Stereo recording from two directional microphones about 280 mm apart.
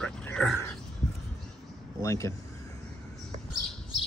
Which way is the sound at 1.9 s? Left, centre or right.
Centre.